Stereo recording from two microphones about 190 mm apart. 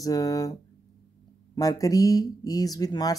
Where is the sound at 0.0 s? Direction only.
20° left (ahead or behind).